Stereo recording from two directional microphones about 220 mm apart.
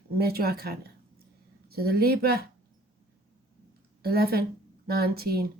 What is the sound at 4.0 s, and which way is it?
Speech, 45° right (ahead or behind).